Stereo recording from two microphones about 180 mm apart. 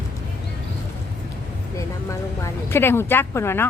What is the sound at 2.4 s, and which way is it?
Speech, 15° left (ahead or behind).